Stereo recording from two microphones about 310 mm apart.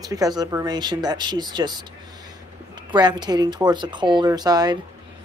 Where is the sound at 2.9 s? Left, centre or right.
Centre.